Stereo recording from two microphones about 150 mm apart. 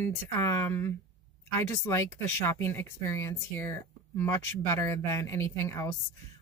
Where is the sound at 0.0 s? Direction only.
15° left (ahead or behind).